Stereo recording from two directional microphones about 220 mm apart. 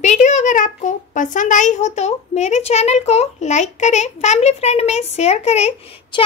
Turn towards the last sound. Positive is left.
turn(degrees=30)  # may be behind; listen again after turning